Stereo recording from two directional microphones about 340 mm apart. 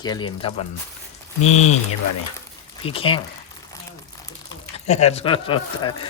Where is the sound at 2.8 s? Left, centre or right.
Centre.